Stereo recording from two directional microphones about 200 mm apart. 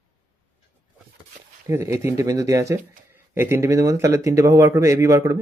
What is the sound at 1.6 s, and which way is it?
Speech, 15° right (ahead or behind).